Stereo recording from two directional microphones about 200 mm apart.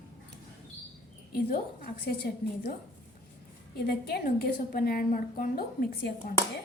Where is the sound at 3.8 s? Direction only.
55° left (ahead or behind).